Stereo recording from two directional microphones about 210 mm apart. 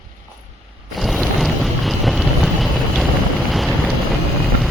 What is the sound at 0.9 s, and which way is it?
Vehicle, centre (ahead or behind).